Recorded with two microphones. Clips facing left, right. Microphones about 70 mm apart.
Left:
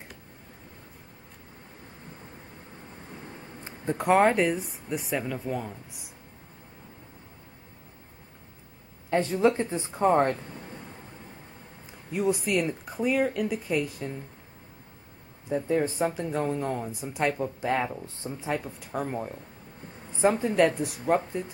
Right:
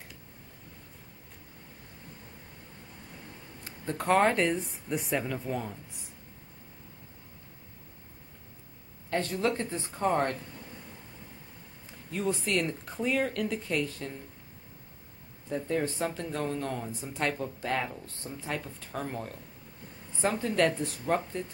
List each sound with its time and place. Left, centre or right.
3.2 s speech: left; by 5.8 s centre
9.1 s speech: centre
10.6 s a sound: left
11.8 s speech: centre
15.4 s speech: centre